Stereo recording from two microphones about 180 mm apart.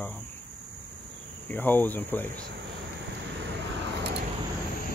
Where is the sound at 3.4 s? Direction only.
75° right (ahead or behind).